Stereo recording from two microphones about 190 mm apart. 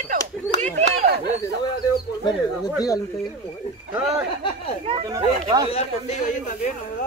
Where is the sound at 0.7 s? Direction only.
35° right (ahead or behind).